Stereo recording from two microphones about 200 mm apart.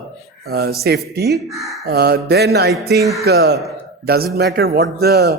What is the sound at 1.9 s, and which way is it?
Speech, 50° right (ahead or behind).